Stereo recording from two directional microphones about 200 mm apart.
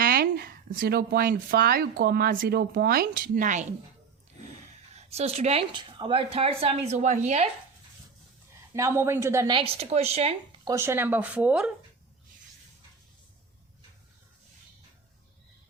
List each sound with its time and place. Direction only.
0.0 s speech: 45° right (ahead or behind)
4.9 s speech: 30° right (ahead or behind)
8.7 s speech: 15° right (ahead or behind); by 10.3 s 30° right (ahead or behind)
10.7 s speech: 15° right (ahead or behind)